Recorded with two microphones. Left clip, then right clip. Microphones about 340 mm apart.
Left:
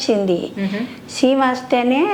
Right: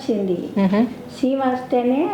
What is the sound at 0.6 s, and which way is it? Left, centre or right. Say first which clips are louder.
Speech: right 5 dB; right.